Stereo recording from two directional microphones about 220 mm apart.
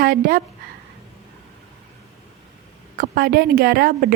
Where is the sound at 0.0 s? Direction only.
40° right (ahead or behind).